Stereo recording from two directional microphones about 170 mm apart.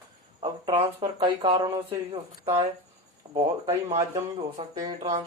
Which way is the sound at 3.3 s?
35° right (ahead or behind).